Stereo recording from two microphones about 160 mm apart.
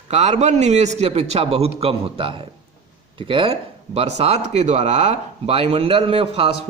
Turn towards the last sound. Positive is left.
turn(degrees=-35)  # may be behind; listen again after turning